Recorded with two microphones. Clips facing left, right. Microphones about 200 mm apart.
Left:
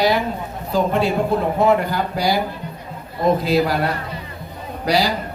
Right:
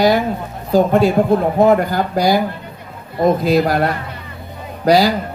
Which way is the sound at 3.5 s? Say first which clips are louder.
Right 3 dB; 45° right (ahead or behind).